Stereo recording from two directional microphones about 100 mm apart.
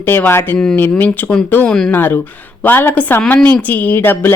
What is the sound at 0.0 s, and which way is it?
A woman's voice, 20° left (ahead or behind).